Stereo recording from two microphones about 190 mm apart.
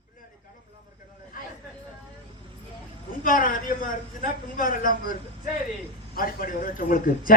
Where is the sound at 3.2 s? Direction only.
45° left (ahead or behind).